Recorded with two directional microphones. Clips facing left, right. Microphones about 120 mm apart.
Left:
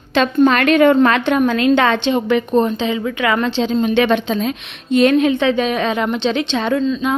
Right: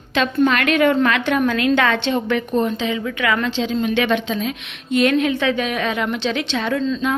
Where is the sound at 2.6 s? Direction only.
30° left (ahead or behind).